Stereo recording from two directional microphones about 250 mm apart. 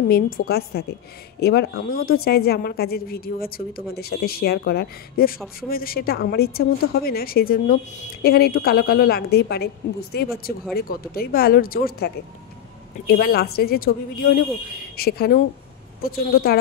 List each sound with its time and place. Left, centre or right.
0.1 s a woman's voice: left
15.0 s a woman's voice: left